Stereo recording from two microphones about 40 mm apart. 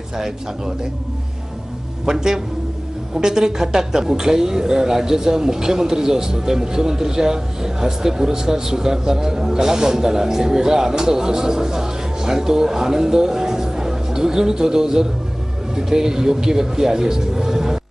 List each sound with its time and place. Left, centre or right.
2.0 s speech: centre